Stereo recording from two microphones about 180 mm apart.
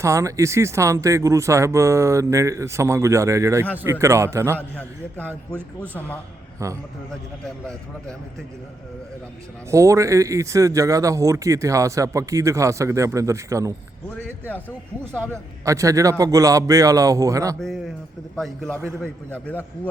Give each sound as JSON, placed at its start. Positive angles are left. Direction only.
{"t": 0.0, "sound": "speech", "side_deg": -15}
{"t": 4.8, "sound": "a man's voice", "side_deg": 10}
{"t": 6.6, "sound": "speech", "side_deg": -15}
{"t": 9.6, "sound": "speech", "side_deg": -15}
{"t": 14.1, "sound": "a man's voice", "side_deg": 10}
{"t": 15.6, "sound": "speech", "side_deg": -15}
{"t": 18.3, "sound": "a man's voice", "side_deg": 0}